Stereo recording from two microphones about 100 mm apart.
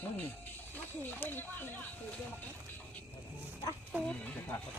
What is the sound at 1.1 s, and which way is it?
Speech, 20° left (ahead or behind).